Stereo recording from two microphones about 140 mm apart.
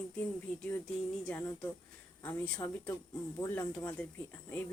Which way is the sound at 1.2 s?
15° left (ahead or behind).